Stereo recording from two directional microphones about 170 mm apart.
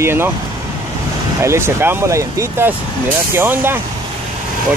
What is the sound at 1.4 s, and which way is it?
Speech, 15° right (ahead or behind).